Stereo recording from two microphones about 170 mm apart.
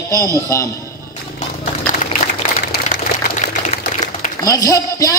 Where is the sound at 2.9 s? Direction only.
45° left (ahead or behind).